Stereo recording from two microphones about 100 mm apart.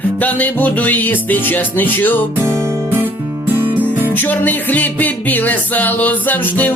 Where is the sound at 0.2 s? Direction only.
15° left (ahead or behind).